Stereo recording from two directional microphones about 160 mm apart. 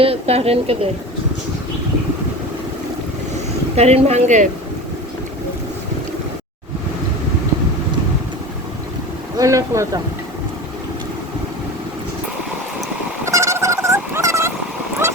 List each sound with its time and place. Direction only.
0.0 s speech: 40° right (ahead or behind)
3.8 s speech: 40° right (ahead or behind)
9.4 s speech: 20° right (ahead or behind)
13.2 s a sound: 15° right (ahead or behind)